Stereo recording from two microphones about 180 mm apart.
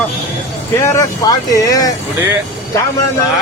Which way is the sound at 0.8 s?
15° left (ahead or behind).